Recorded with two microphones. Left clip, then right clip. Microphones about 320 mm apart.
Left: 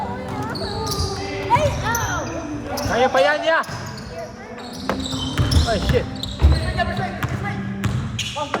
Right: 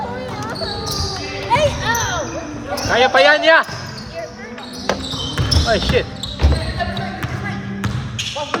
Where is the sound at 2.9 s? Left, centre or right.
Right.